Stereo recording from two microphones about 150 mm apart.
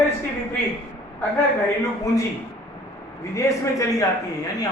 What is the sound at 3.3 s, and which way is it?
Speech, 20° left (ahead or behind).